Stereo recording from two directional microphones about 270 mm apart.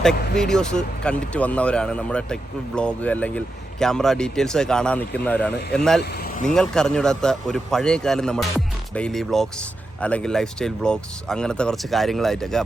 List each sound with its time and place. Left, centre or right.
0.0 s a man's voice: centre
6.0 s speech: left
6.4 s a man's voice: centre